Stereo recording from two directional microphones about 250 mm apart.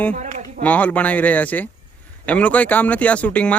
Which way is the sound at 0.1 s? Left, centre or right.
Right.